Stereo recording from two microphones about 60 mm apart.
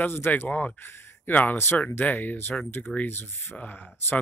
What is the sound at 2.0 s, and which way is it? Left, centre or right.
Speech, left.